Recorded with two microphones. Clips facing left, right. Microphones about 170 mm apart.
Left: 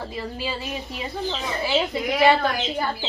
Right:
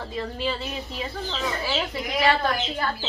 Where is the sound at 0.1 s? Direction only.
10° left (ahead or behind).